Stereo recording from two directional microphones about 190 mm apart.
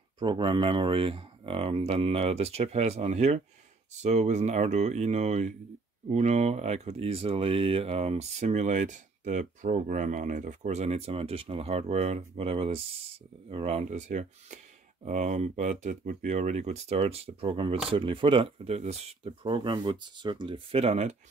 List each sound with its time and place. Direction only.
0.2 s speech: 25° right (ahead or behind)